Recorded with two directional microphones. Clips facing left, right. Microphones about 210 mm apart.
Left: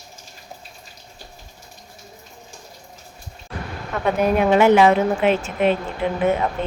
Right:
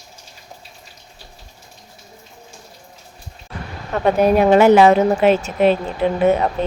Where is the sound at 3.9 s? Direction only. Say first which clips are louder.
Right 4 dB; 35° right (ahead or behind).